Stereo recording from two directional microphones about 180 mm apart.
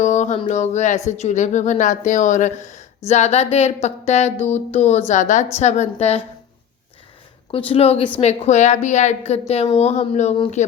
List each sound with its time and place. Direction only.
0.0 s music: 40° left (ahead or behind)
0.4 s speech: 40° left (ahead or behind)
7.5 s speech: 35° left (ahead or behind)